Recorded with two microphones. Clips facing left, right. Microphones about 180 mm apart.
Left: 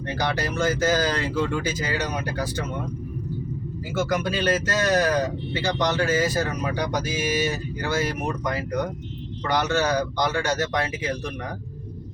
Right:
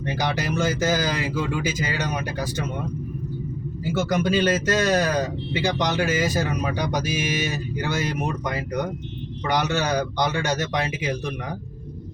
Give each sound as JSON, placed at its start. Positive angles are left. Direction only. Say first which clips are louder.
{"t": 0.0, "sound": "speech", "louder": "even", "side_deg": -15}
{"t": 4.3, "sound": "speech", "louder": "right 3 dB", "side_deg": -20}